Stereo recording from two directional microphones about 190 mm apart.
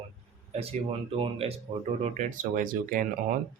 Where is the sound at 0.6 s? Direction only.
30° right (ahead or behind).